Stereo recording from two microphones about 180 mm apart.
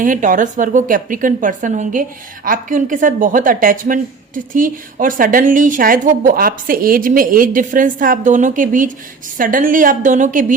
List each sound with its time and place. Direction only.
0.0 s a woman's voice: 45° right (ahead or behind)